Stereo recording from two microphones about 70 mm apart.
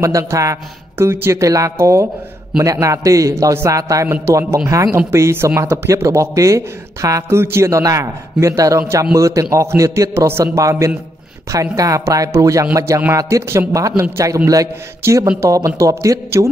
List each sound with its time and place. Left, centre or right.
0.0 s speech: right
1.3 s speech: right
15.4 s speech: right